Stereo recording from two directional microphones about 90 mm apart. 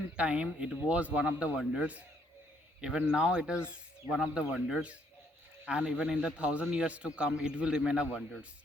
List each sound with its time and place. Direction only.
0.2 s a man's voice: 10° right (ahead or behind)